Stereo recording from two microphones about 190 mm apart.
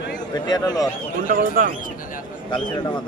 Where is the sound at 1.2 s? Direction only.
45° right (ahead or behind).